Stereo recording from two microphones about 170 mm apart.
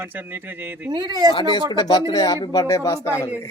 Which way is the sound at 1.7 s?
25° left (ahead or behind).